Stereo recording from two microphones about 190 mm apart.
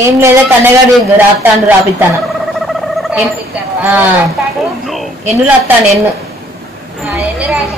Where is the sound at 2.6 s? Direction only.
Centre (ahead or behind).